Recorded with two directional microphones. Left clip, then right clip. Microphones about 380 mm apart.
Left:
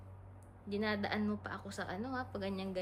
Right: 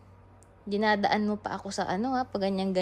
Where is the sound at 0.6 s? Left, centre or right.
Centre.